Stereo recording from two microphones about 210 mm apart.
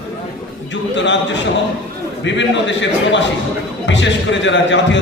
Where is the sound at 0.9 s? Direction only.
60° left (ahead or behind).